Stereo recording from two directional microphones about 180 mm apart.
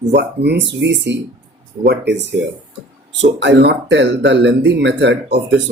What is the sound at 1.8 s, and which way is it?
Speech, 70° right (ahead or behind).